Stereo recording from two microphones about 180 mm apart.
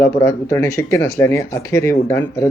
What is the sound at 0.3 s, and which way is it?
Speech, 15° left (ahead or behind).